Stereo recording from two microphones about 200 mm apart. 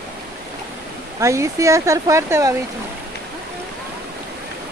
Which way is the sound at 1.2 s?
15° right (ahead or behind).